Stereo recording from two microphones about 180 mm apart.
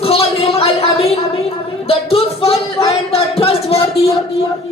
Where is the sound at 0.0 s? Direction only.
30° left (ahead or behind).